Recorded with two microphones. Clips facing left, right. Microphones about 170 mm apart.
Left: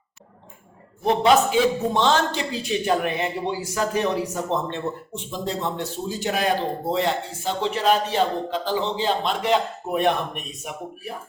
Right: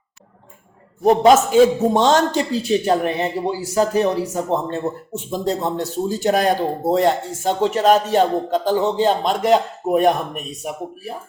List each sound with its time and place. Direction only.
1.0 s a man's voice: 40° right (ahead or behind)